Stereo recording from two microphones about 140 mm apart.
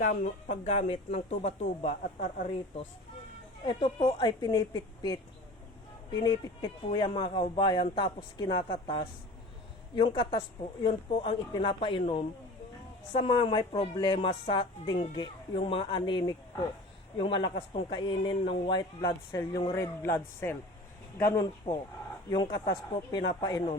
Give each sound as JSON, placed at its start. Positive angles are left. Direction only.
{"t": 0.0, "sound": "speech", "side_deg": 75}
{"t": 3.7, "sound": "speech", "side_deg": 40}
{"t": 4.2, "sound": "a woman's voice", "side_deg": 30}
{"t": 6.2, "sound": "a woman's voice", "side_deg": 35}
{"t": 22.3, "sound": "a woman's voice", "side_deg": 30}